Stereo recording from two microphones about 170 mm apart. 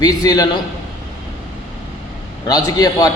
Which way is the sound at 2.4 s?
20° left (ahead or behind).